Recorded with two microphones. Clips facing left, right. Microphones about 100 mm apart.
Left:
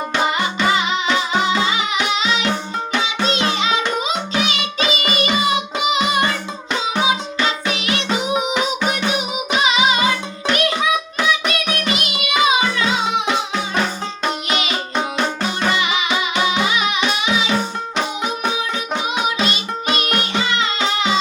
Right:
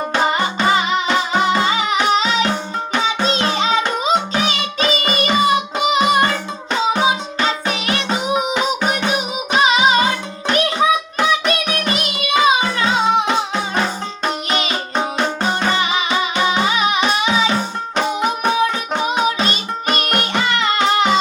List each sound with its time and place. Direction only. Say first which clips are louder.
0.1 s music: right 2 dB; 40° right (ahead or behind)
14.5 s music: right 1 dB; 35° right (ahead or behind); by 21.2 s 55° right (ahead or behind)